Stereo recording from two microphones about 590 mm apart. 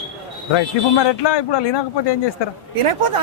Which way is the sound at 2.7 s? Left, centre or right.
Right.